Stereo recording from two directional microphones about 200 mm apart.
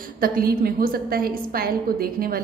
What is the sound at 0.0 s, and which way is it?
A woman's voice, 50° right (ahead or behind).